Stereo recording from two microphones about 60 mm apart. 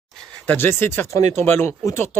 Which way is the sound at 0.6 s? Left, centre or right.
Left.